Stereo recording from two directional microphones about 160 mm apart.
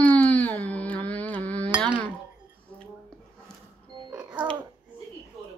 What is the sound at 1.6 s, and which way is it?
Dishes, 30° right (ahead or behind).